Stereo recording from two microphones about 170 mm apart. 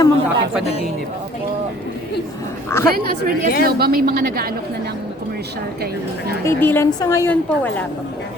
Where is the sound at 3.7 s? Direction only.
65° right (ahead or behind).